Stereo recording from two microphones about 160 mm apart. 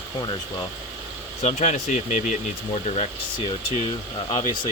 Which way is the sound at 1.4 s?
45° left (ahead or behind).